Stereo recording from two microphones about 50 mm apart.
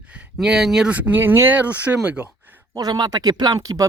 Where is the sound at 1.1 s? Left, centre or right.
Right.